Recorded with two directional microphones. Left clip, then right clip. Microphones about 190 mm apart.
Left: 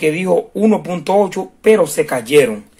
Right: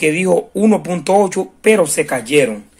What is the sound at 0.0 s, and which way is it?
Speech, 10° right (ahead or behind).